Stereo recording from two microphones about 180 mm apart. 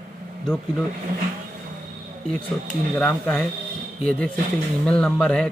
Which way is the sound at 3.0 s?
10° left (ahead or behind).